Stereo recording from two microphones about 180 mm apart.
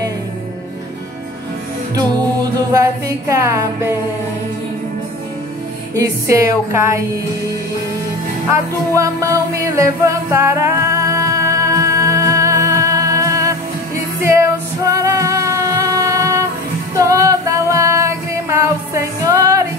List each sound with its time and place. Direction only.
2.0 s a capella: 20° right (ahead or behind)
5.9 s speech: 20° right (ahead or behind)
8.5 s music: 15° right (ahead or behind)